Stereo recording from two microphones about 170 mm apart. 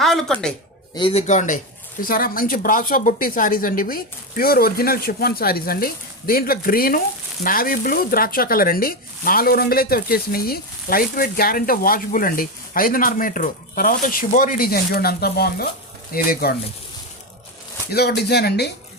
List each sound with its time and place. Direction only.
0.0 s speech: centre (ahead or behind)
0.9 s speech: 30° left (ahead or behind)
1.3 s speech: 45° left (ahead or behind)
2.0 s speech: 55° left (ahead or behind)
17.9 s speech: 75° left (ahead or behind)